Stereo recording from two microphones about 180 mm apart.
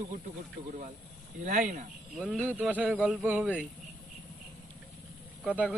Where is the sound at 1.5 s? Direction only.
45° right (ahead or behind).